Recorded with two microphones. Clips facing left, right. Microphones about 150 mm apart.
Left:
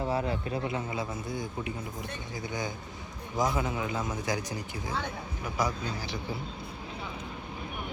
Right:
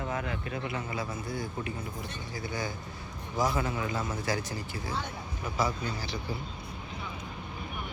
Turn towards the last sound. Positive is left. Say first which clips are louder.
# even
turn(degrees=15)  # may be behind; listen again after turning